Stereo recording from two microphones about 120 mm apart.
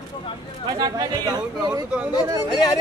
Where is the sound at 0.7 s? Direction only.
35° right (ahead or behind).